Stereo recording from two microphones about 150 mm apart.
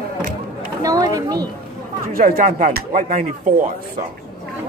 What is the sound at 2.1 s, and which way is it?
Speech, 65° right (ahead or behind).